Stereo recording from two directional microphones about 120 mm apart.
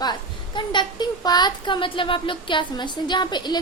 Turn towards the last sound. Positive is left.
turn(degrees=40)  # may be behind; listen again after turning